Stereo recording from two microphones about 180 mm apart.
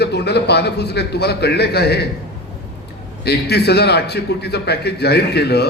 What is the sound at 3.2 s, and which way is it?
A man's voice, 65° left (ahead or behind).